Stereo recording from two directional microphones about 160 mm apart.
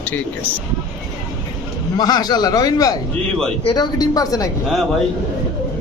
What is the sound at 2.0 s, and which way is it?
A man's voice, 25° left (ahead or behind).